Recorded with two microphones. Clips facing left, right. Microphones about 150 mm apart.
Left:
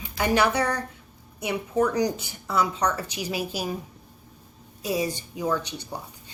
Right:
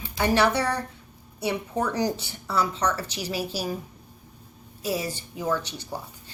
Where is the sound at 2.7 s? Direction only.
10° left (ahead or behind).